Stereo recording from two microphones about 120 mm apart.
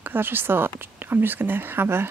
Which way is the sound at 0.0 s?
15° right (ahead or behind).